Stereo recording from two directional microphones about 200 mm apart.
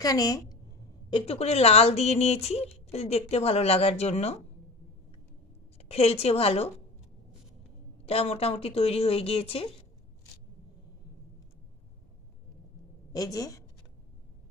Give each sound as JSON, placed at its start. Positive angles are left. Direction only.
{"t": 0.0, "sound": "a woman's voice", "side_deg": 20}
{"t": 1.1, "sound": "speech", "side_deg": 30}
{"t": 5.8, "sound": "a woman's voice", "side_deg": 30}
{"t": 8.0, "sound": "speech", "side_deg": 30}
{"t": 13.1, "sound": "a woman's voice", "side_deg": 20}